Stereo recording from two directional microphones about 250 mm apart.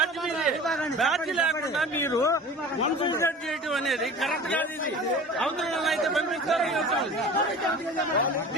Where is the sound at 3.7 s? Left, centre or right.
Centre.